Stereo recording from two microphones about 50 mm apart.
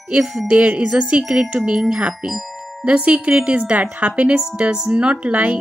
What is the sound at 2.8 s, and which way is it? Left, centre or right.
Speech, right.